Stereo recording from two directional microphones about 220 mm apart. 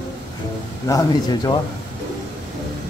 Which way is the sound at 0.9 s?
15° left (ahead or behind).